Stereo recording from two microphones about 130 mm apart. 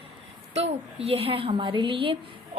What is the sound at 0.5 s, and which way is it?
A woman's voice, 55° right (ahead or behind).